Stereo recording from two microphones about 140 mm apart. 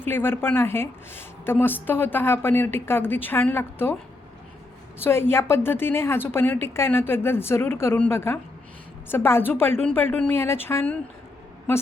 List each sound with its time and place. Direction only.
0.0 s a woman's voice: 15° left (ahead or behind)
5.0 s a woman's voice: 15° left (ahead or behind)